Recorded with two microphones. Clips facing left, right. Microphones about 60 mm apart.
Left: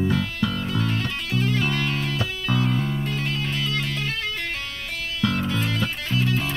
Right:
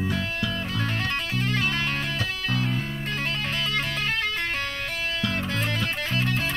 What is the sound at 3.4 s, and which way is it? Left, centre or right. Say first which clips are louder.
Music: left 1 dB; right.